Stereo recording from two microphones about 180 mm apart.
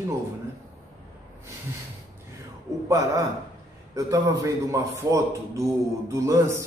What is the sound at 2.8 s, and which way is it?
A man's voice, 15° right (ahead or behind).